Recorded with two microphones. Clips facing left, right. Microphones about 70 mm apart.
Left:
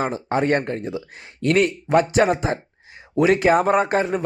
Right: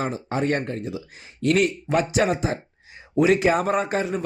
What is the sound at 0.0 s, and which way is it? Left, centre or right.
Speech, left.